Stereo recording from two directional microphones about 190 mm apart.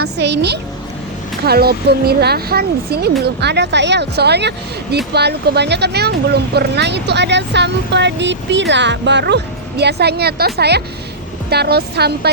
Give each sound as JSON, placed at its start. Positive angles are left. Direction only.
{"t": 0.2, "sound": "speech", "side_deg": -60}